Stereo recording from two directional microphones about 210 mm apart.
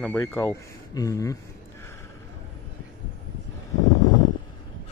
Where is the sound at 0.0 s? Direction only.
10° left (ahead or behind).